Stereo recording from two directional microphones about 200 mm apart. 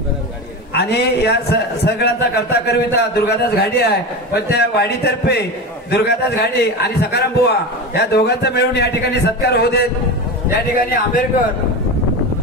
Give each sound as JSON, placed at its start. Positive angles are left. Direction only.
{"t": 0.7, "sound": "a man's voice", "side_deg": 55}